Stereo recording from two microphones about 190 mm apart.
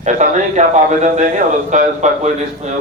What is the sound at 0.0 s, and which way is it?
A man's voice, 40° right (ahead or behind).